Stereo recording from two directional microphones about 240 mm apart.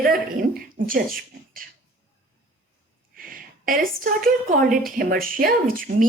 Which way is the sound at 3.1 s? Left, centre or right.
Right.